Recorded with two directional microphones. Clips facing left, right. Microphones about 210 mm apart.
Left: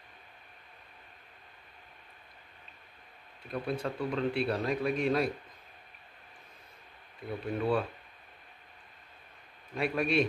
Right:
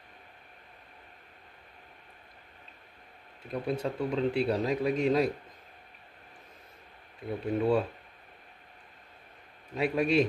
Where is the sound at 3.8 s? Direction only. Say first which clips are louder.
Right 3 dB; 20° right (ahead or behind).